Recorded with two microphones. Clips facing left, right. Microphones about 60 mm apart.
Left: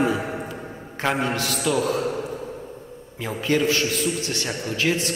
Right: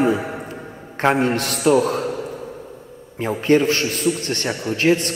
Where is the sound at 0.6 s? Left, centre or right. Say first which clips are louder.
Even; centre.